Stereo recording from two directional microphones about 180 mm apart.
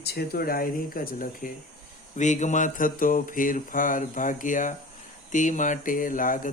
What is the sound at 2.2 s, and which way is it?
Speech, 40° left (ahead or behind).